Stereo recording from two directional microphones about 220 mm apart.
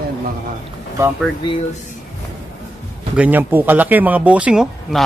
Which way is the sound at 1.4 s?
25° left (ahead or behind).